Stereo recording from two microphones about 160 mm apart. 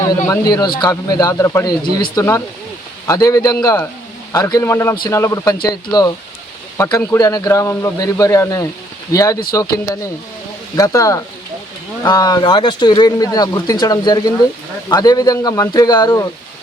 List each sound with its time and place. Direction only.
0.0 s speech: 20° left (ahead or behind)